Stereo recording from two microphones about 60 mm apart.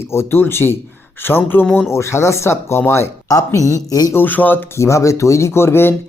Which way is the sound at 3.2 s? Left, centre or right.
Left.